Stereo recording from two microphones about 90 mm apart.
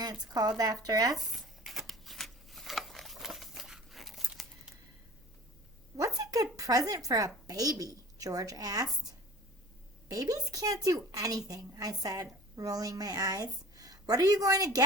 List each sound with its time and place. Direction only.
0.0 s speech: 50° right (ahead or behind)
1.1 s shuffling cards: centre (ahead or behind)
6.1 s speech: 40° right (ahead or behind)
10.1 s speech: 40° right (ahead or behind)